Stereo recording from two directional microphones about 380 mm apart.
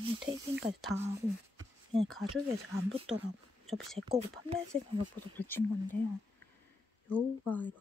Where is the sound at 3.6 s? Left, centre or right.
Centre.